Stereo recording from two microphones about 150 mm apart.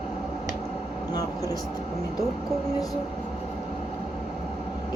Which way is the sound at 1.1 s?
25° left (ahead or behind).